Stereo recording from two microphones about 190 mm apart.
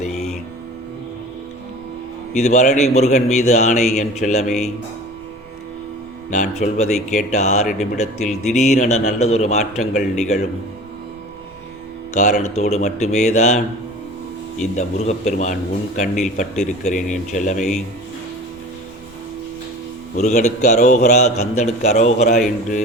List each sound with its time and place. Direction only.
2.3 s speech: 40° left (ahead or behind)
6.3 s speech: 40° left (ahead or behind)
12.1 s speech: 40° left (ahead or behind)
20.1 s speech: 40° left (ahead or behind)